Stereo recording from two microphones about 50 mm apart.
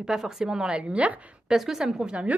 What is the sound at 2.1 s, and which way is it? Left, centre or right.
Speech, right.